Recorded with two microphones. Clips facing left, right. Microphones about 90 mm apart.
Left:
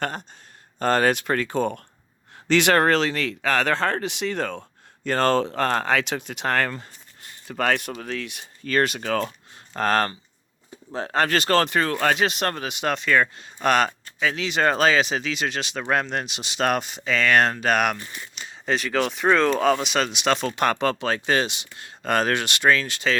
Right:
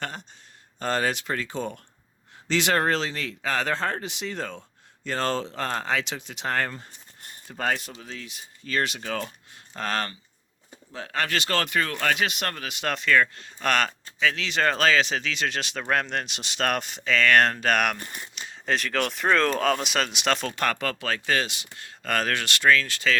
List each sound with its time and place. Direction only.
0.0 s speech: 50° left (ahead or behind)
9.7 s speech: 45° left (ahead or behind)
12.6 s speech: 20° left (ahead or behind)
17.9 s speech: 50° right (ahead or behind)
18.3 s speech: centre (ahead or behind)
20.6 s speech: 25° left (ahead or behind)